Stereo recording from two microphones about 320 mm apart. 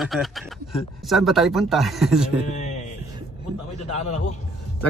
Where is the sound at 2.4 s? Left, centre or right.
Left.